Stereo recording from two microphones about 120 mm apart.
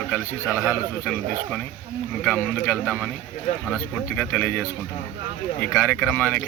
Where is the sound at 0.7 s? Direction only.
10° left (ahead or behind).